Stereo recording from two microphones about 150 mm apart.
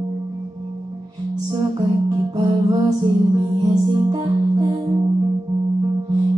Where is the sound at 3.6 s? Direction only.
25° right (ahead or behind).